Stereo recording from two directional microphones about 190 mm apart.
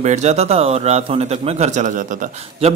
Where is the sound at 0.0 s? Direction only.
35° right (ahead or behind).